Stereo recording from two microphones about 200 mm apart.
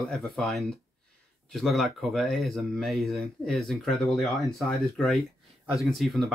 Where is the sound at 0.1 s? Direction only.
Centre (ahead or behind).